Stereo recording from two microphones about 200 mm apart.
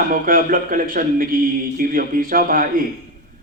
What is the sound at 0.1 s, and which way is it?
A man's voice, 45° right (ahead or behind).